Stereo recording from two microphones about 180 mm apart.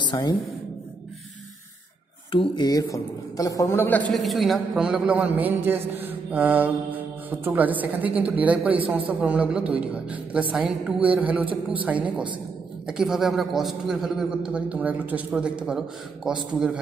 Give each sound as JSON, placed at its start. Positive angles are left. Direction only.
{"t": 0.0, "sound": "speech", "side_deg": 20}
{"t": 2.3, "sound": "a woman's voice", "side_deg": 25}
{"t": 4.1, "sound": "a man's voice", "side_deg": 0}